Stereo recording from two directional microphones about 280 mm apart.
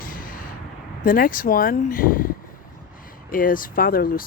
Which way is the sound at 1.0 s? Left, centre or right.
Left.